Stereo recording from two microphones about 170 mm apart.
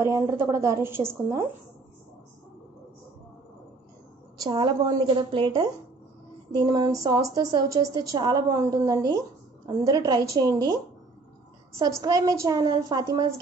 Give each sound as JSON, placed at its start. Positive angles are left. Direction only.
{"t": 0.0, "sound": "a woman's voice", "side_deg": -15}
{"t": 4.4, "sound": "speech", "side_deg": -25}
{"t": 11.8, "sound": "speech", "side_deg": -20}